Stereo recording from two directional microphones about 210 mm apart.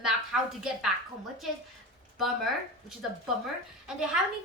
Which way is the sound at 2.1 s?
Centre (ahead or behind).